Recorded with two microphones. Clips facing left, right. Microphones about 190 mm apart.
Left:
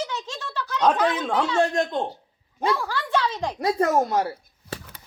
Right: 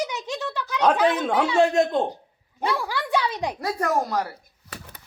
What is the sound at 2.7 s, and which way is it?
Speech, 15° right (ahead or behind).